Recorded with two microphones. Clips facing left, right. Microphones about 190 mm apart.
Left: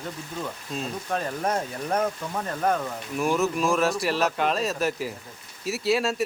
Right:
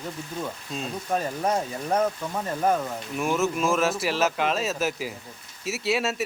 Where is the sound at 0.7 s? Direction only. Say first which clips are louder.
Right 1 dB; centre (ahead or behind).